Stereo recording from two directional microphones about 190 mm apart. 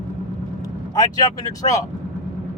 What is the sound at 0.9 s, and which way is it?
Speech, 20° left (ahead or behind).